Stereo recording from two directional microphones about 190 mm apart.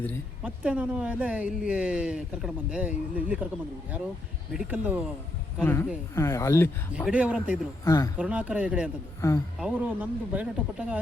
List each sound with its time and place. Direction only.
0.4 s speech: 5° right (ahead or behind)
4.5 s speech: 10° right (ahead or behind)
5.6 s speech: 10° left (ahead or behind)
6.9 s speech: 5° right (ahead or behind)
7.9 s speech: 15° left (ahead or behind)
8.2 s speech: 5° right (ahead or behind)
9.2 s speech: 15° left (ahead or behind)
9.6 s speech: 5° right (ahead or behind)